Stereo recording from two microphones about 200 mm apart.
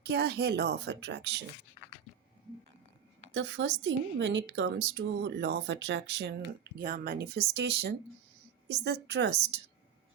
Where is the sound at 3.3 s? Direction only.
70° right (ahead or behind).